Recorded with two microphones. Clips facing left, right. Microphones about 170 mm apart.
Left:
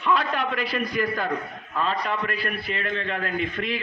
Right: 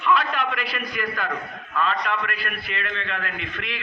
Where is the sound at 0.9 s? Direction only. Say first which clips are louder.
Left 3 dB; 25° left (ahead or behind).